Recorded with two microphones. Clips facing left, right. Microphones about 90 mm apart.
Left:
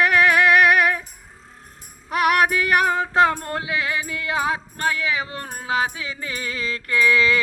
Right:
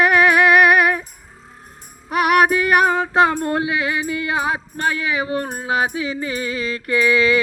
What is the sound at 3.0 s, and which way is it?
Music, 20° right (ahead or behind).